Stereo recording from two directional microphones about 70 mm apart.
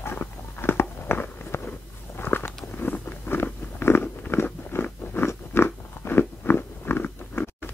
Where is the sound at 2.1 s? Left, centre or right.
Left.